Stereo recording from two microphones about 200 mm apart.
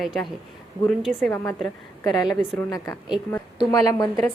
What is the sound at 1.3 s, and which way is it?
A woman's voice, 15° left (ahead or behind).